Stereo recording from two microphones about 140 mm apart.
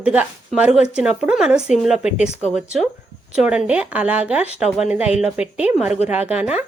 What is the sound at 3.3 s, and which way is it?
Speech, 5° right (ahead or behind).